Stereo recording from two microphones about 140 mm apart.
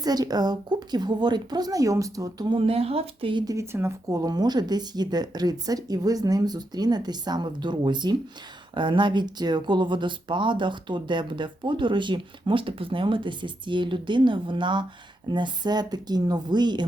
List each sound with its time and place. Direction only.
0.0 s speech: 30° right (ahead or behind)
3.4 s speech: 20° right (ahead or behind)